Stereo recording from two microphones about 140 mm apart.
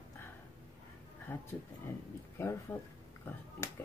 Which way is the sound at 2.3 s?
20° left (ahead or behind).